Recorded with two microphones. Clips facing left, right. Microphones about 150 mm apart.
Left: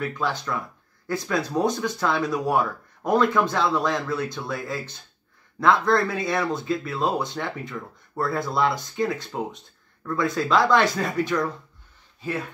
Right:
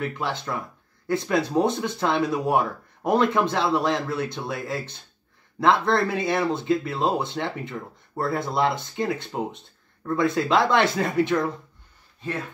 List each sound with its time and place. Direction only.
0.0 s speech: 25° right (ahead or behind)